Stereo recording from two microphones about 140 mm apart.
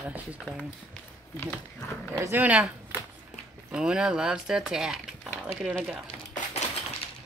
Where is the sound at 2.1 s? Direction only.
15° right (ahead or behind).